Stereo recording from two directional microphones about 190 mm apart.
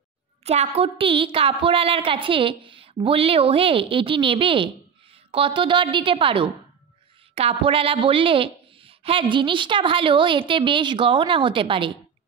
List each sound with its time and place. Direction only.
0.4 s a woman's voice: 35° right (ahead or behind)